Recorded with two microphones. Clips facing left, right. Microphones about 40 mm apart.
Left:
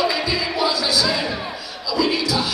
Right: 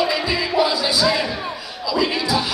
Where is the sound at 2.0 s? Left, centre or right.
Right.